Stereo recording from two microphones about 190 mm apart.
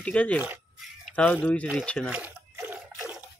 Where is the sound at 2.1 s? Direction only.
5° right (ahead or behind).